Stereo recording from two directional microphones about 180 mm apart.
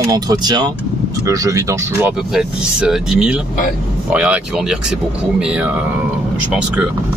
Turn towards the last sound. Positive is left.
turn(degrees=-5)  # may be behind; listen again after turning